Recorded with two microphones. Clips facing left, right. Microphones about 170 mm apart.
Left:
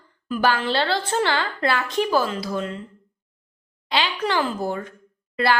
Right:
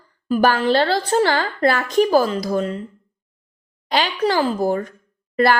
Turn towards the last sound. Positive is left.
turn(degrees=-45)  # may be behind; listen again after turning